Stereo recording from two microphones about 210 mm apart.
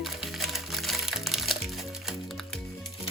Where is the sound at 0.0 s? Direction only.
Centre (ahead or behind).